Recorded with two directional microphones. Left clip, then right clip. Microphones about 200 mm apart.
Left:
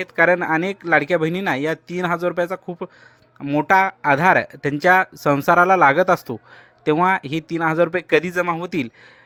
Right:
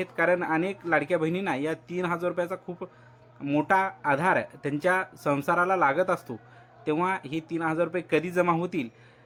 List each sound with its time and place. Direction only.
0.0 s speech: 40° left (ahead or behind)